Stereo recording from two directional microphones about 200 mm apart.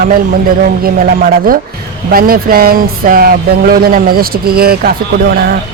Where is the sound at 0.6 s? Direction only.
45° right (ahead or behind).